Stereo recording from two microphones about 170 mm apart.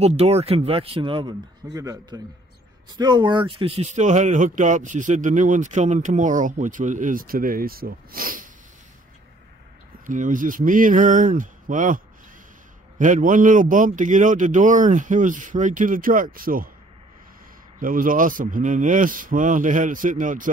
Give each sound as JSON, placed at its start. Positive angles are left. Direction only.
{"t": 0.0, "sound": "speech", "side_deg": -40}
{"t": 10.0, "sound": "speech", "side_deg": -50}
{"t": 13.0, "sound": "speech", "side_deg": -50}
{"t": 17.7, "sound": "speech", "side_deg": -55}